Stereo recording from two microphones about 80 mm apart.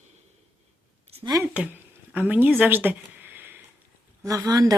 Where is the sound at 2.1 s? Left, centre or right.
Right.